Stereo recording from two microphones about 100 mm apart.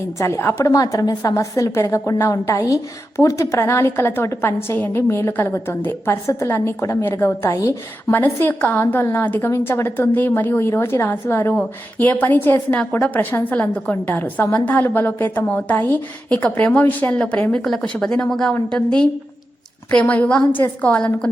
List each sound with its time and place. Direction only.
0.2 s a woman's voice: 25° left (ahead or behind)
8.1 s a woman's voice: 20° left (ahead or behind)
9.5 s a woman's voice: 25° left (ahead or behind)